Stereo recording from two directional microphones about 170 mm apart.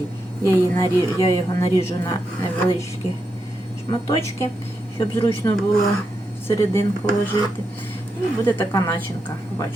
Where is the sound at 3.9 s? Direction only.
20° left (ahead or behind).